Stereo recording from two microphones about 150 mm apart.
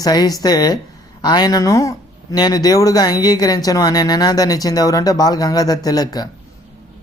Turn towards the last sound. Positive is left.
turn(degrees=25)  # may be behind; listen again after turning